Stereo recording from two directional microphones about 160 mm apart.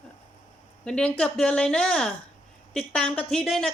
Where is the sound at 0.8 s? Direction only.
5° left (ahead or behind).